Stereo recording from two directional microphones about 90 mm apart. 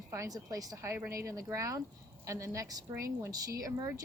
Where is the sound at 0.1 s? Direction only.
40° right (ahead or behind).